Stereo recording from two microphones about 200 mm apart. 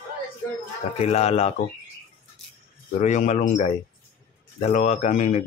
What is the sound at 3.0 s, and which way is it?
Speech, 35° left (ahead or behind).